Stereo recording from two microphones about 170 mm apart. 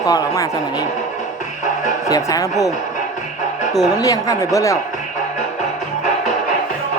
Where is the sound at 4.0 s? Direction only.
20° left (ahead or behind).